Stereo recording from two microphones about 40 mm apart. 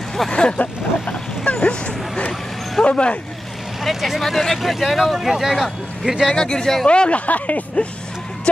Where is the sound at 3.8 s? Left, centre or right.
Centre.